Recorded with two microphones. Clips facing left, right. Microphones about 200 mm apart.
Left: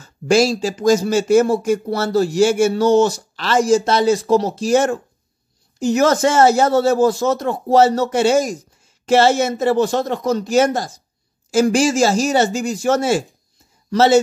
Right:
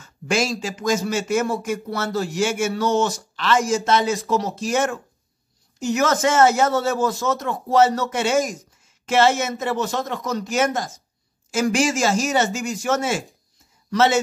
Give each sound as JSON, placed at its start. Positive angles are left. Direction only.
{"t": 0.0, "sound": "a man's voice", "side_deg": 35}